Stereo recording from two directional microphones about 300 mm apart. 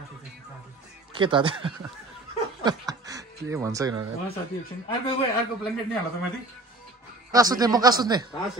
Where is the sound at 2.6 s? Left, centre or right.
Centre.